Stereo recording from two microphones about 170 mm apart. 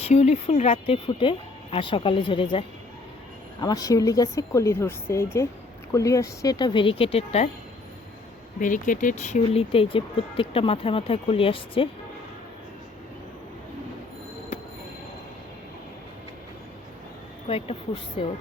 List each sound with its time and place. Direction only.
0.0 s a woman's voice: 40° left (ahead or behind)
8.6 s speech: 50° left (ahead or behind); by 11.9 s 30° left (ahead or behind)
18.2 s speech: 35° left (ahead or behind)